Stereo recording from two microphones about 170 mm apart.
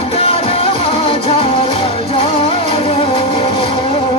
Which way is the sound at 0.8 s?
30° left (ahead or behind).